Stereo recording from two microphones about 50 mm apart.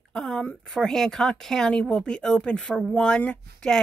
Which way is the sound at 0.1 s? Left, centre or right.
Centre.